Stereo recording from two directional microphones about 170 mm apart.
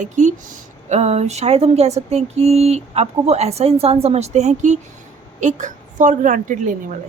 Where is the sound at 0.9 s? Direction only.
40° right (ahead or behind).